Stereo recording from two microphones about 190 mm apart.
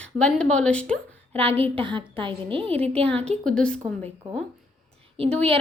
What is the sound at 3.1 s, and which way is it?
Speech, 5° left (ahead or behind).